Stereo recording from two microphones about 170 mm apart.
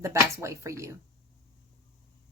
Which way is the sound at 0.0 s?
15° right (ahead or behind).